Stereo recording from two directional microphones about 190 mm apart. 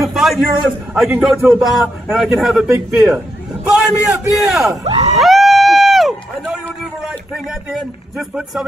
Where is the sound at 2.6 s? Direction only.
10° right (ahead or behind).